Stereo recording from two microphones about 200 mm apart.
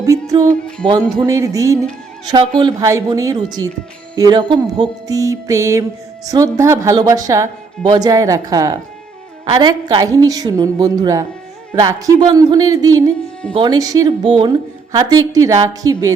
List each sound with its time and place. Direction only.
0.0 s music: 15° right (ahead or behind)
9.5 s a woman's voice: 25° right (ahead or behind)
11.7 s music: 15° right (ahead or behind)
13.5 s a woman's voice: 20° right (ahead or behind)
14.9 s music: 20° right (ahead or behind)